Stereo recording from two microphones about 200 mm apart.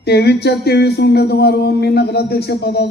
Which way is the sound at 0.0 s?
55° left (ahead or behind).